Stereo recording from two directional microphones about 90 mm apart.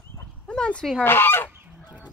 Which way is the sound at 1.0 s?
25° left (ahead or behind).